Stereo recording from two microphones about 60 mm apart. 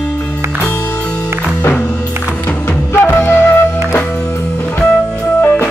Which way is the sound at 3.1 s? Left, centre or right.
Left.